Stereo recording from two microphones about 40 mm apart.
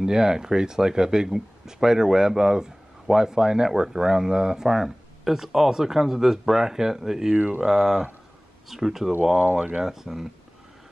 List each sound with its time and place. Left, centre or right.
0.0 s speech: centre
7.3 s speech: right
7.6 s speech: centre